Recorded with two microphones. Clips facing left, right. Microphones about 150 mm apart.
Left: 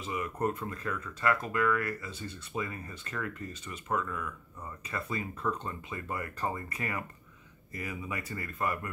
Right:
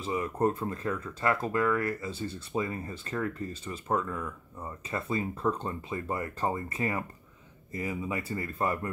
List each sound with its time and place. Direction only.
0.0 s speech: 30° right (ahead or behind)